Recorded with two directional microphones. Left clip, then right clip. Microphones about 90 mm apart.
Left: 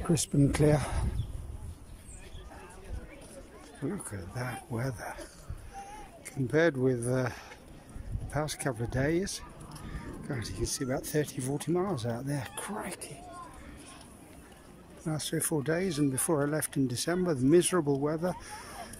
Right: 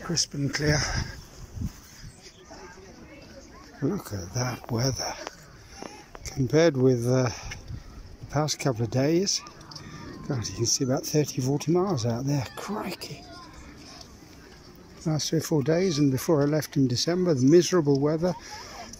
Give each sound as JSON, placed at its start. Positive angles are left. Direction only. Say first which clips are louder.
{"t": 0.1, "sound": "speech", "louder": "right 1 dB", "side_deg": 40}
{"t": 3.8, "sound": "speech", "louder": "right 7 dB", "side_deg": -10}
{"t": 6.4, "sound": "speech", "louder": "right 5 dB", "side_deg": -5}
{"t": 15.0, "sound": "speech", "louder": "right 6 dB", "side_deg": -15}